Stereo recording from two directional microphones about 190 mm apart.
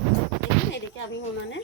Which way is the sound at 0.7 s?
70° left (ahead or behind).